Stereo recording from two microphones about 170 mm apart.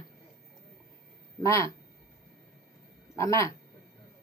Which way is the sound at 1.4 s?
15° left (ahead or behind).